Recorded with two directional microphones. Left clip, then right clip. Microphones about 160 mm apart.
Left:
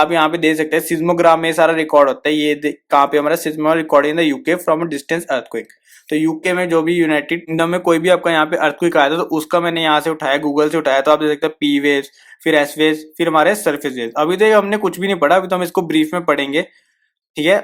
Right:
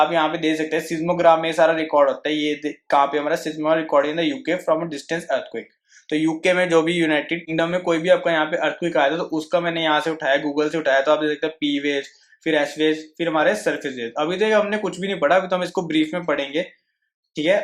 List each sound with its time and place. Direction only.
0.0 s speech: 45° left (ahead or behind)